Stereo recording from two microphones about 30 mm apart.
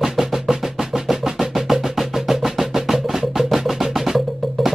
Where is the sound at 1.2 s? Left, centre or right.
Centre.